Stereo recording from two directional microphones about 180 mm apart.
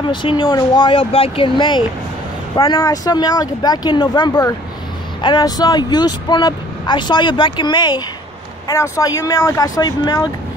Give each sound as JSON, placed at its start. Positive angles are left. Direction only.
{"t": 0.1, "sound": "speech", "side_deg": 25}